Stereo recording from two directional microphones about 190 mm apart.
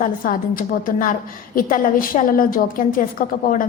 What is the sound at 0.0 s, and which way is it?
A woman's voice, 45° left (ahead or behind).